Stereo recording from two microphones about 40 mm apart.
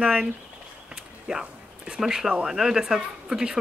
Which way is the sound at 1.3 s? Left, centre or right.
Centre.